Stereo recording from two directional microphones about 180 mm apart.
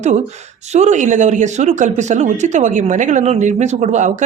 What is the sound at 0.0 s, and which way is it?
Speech, 40° right (ahead or behind).